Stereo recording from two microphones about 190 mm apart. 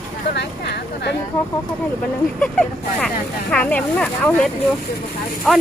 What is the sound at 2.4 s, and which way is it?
Speech, 5° left (ahead or behind).